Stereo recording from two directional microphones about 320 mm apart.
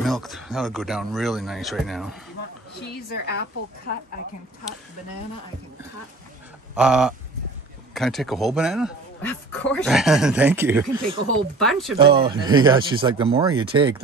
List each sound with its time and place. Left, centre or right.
0.0 s a man's voice: centre
3.1 s a woman's voice: left
6.7 s a man's voice: centre
12.0 s speech: centre